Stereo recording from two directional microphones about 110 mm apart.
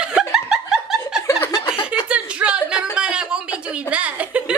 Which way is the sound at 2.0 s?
10° right (ahead or behind).